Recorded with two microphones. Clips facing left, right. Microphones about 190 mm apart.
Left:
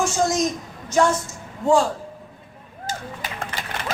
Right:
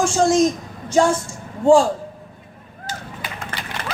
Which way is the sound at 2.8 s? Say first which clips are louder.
Left 1 dB; 45° left (ahead or behind).